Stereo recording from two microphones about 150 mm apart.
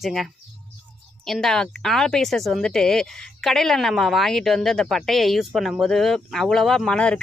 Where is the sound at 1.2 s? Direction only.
Centre (ahead or behind).